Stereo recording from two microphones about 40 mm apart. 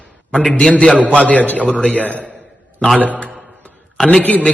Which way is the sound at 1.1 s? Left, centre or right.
Left.